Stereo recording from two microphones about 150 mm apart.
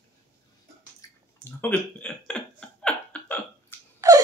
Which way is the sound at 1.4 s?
10° left (ahead or behind).